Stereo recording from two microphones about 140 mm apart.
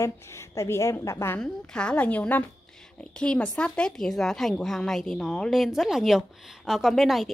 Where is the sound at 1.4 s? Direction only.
5° left (ahead or behind).